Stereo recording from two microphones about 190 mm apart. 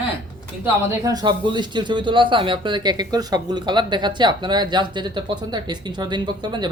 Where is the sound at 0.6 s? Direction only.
15° right (ahead or behind).